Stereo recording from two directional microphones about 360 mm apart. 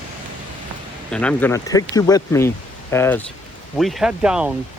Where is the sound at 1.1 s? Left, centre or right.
Centre.